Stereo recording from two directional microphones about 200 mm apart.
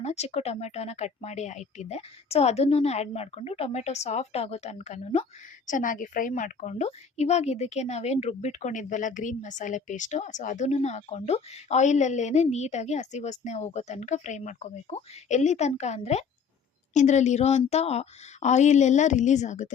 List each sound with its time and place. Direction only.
0.0 s a woman's voice: 35° left (ahead or behind)